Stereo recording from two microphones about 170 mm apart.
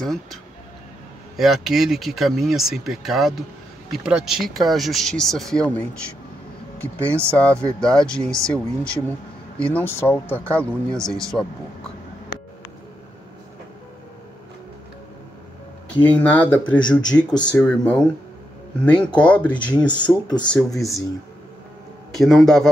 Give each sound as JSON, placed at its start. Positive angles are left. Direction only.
{"t": 0.0, "sound": "speech", "side_deg": 0}
{"t": 16.0, "sound": "speech", "side_deg": 10}
{"t": 19.1, "sound": "speech", "side_deg": 5}
{"t": 20.2, "sound": "speech", "side_deg": 25}
{"t": 20.5, "sound": "speech", "side_deg": 0}
{"t": 22.1, "sound": "speech", "side_deg": 0}